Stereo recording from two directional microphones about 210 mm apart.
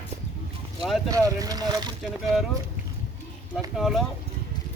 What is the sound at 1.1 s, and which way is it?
Speech, 15° right (ahead or behind).